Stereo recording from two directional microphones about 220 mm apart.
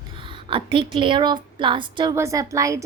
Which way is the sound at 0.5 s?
25° right (ahead or behind).